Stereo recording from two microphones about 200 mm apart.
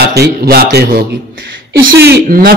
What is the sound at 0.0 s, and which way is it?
A man's voice, 55° right (ahead or behind).